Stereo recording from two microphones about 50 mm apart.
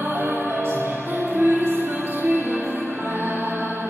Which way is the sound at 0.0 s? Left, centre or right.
Right.